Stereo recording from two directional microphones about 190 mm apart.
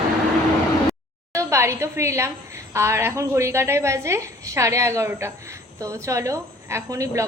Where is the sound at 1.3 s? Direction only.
15° right (ahead or behind).